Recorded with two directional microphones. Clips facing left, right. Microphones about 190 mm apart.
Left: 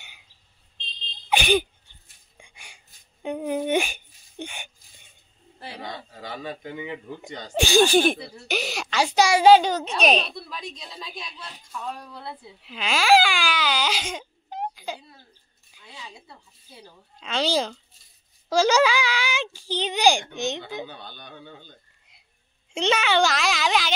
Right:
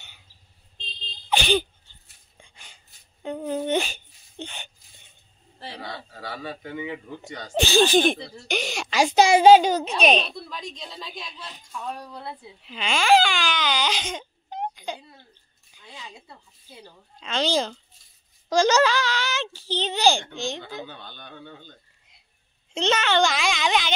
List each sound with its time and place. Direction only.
1.3 s sneeze: 15° left (ahead or behind)
2.3 s a sound: 10° left (ahead or behind)
5.7 s a sound: 20° left (ahead or behind)
7.2 s speech: 15° left (ahead or behind)
8.9 s a child's voice: 20° right (ahead or behind)
9.8 s a woman's voice: centre (ahead or behind)
12.6 s baby cry: 5° left (ahead or behind)
17.2 s a woman's voice: 5° left (ahead or behind)